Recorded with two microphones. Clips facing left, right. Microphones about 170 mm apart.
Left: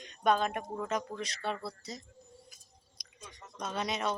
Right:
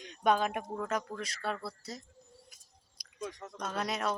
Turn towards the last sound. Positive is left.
turn(degrees=0)  # may be behind; listen again after turning